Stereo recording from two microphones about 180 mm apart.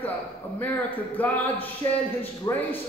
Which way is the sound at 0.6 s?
10° left (ahead or behind).